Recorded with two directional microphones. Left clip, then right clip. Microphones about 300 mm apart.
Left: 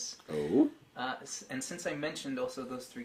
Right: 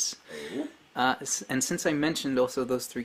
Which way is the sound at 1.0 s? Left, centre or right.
Right.